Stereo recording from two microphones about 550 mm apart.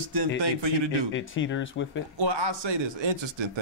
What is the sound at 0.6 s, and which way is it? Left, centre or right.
Speech, right.